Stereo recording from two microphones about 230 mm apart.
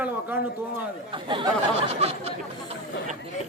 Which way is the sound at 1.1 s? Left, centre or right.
Right.